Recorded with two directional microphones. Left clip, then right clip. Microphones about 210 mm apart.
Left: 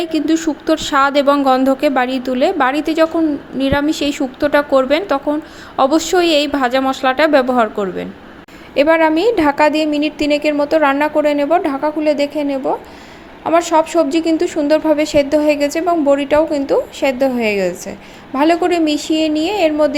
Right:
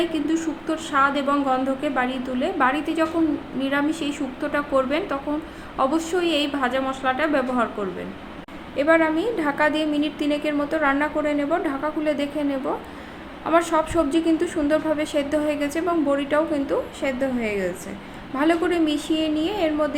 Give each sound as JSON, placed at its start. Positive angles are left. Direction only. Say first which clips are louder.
{"t": 0.0, "sound": "a woman's voice", "louder": "left 7 dB", "side_deg": 35}